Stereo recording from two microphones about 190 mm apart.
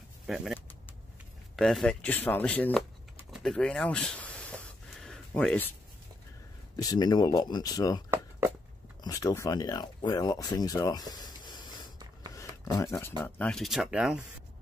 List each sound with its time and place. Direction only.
0.3 s speech: centre (ahead or behind)
1.6 s speech: centre (ahead or behind)
3.3 s a sound: centre (ahead or behind)
6.8 s speech: 20° left (ahead or behind)
9.0 s speech: 20° left (ahead or behind); by 14.2 s 5° right (ahead or behind)